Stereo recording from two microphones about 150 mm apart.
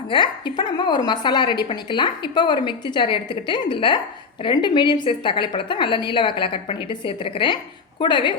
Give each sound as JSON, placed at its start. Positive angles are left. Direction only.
{"t": 0.1, "sound": "a woman's voice", "side_deg": 30}